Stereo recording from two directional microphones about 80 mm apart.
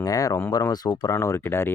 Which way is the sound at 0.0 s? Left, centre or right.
Left.